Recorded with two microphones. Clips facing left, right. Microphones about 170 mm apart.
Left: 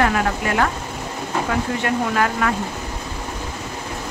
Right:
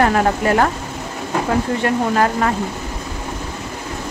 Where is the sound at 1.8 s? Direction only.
35° right (ahead or behind).